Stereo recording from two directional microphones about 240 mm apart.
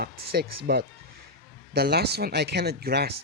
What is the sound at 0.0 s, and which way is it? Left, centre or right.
Speech, right.